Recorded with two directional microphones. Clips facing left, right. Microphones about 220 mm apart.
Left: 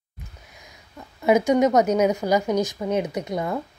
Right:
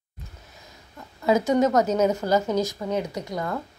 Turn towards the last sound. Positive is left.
turn(degrees=20)  # may be behind; listen again after turning